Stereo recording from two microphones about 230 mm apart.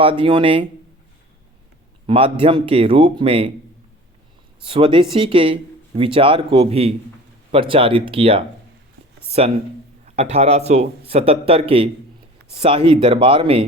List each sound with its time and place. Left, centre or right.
0.0 s a man's voice: right
2.0 s a man's voice: right
4.6 s a man's voice: right